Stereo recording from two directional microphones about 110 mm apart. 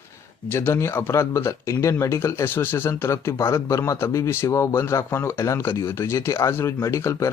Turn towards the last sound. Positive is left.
turn(degrees=25)  # may be behind; listen again after turning